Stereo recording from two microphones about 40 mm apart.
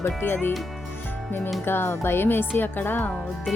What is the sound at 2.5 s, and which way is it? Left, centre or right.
Speech, left.